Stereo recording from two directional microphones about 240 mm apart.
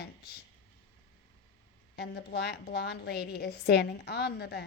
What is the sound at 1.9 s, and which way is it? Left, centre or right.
A woman's voice, left.